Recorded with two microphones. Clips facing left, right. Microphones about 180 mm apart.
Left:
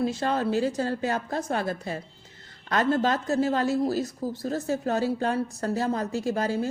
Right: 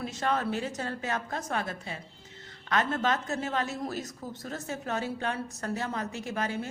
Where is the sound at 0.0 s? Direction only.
30° left (ahead or behind).